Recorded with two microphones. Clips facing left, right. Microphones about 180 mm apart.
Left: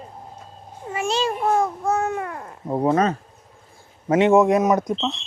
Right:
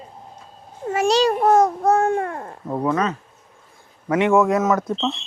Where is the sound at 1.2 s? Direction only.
40° right (ahead or behind).